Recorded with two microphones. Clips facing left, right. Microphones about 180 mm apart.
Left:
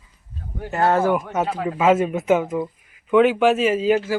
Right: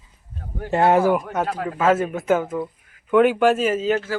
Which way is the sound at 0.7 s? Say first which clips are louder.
Right 2 dB; 20° right (ahead or behind).